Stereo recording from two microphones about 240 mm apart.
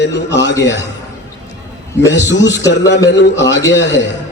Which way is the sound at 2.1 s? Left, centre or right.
Left.